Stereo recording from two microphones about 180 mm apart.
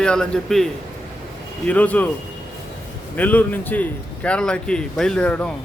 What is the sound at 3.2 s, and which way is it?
A man's voice, 10° left (ahead or behind).